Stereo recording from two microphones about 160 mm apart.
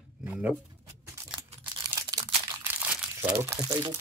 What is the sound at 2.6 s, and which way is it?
Crumpling, 10° right (ahead or behind).